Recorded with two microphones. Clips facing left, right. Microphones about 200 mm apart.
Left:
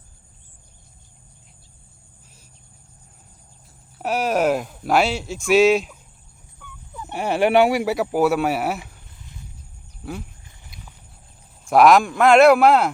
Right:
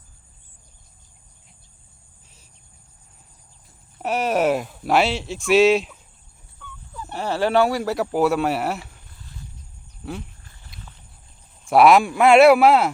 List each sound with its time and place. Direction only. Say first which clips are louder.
3.9 s speech: even; centre (ahead or behind)
6.6 s fowl: even; 15° left (ahead or behind)
8.1 s speech: even; 5° left (ahead or behind)
9.1 s a sound: right 1 dB; 20° left (ahead or behind)
10.4 s a sound: even; 15° left (ahead or behind)
11.6 s speech: even; 5° right (ahead or behind)